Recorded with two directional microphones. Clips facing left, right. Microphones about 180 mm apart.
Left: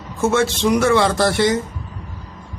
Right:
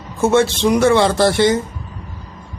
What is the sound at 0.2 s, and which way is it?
Speech, 30° right (ahead or behind).